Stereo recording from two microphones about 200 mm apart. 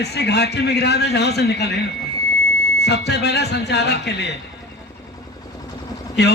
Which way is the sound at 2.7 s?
55° left (ahead or behind).